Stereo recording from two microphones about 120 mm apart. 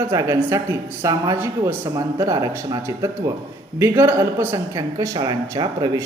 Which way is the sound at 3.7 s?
20° right (ahead or behind).